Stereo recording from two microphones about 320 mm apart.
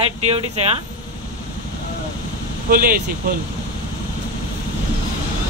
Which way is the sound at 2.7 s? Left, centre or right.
Right.